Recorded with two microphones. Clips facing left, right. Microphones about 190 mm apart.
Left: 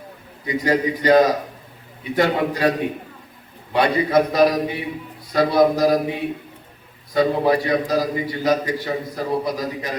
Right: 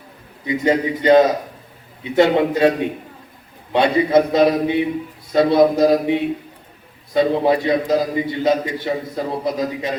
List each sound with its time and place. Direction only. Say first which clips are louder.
0.4 s a man's voice: right 2 dB; 25° right (ahead or behind)